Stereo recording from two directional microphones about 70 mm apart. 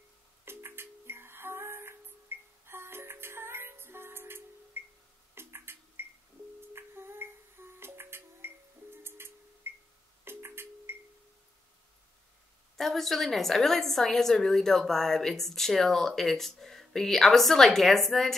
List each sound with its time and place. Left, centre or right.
0.5 s music: right
5.3 s a sound: right
6.7 s music: right
12.7 s a woman's voice: centre